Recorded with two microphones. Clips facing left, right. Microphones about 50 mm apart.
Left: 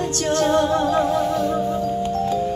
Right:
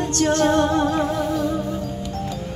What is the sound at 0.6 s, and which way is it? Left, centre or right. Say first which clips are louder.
Music: even; centre.